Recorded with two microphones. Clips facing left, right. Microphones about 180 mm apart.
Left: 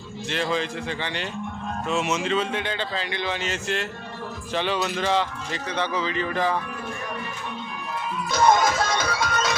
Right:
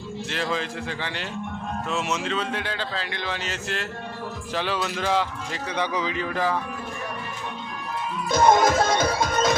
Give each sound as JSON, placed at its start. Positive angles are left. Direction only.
{"t": 0.3, "sound": "a man's voice", "side_deg": 0}
{"t": 8.3, "sound": "music", "side_deg": -55}